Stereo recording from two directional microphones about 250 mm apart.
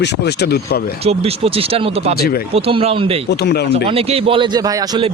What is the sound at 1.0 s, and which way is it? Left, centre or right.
A man's voice, right.